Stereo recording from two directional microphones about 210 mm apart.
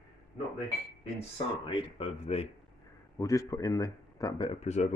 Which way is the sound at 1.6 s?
25° left (ahead or behind).